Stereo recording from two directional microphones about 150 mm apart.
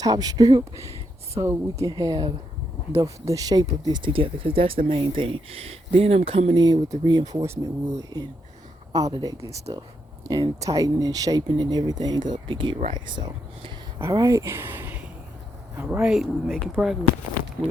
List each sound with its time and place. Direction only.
0.0 s speech: 25° right (ahead or behind); by 17.0 s centre (ahead or behind)